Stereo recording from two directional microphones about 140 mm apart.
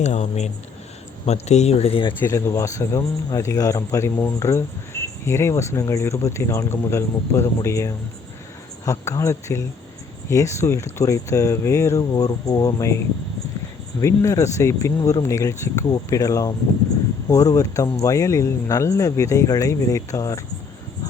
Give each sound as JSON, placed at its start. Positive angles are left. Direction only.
{"t": 0.0, "sound": "speech", "side_deg": 55}
{"t": 2.2, "sound": "a man's voice", "side_deg": 20}
{"t": 14.0, "sound": "a man's voice", "side_deg": 20}